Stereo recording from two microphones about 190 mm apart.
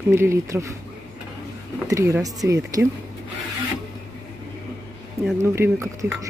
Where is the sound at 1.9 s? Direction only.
15° right (ahead or behind).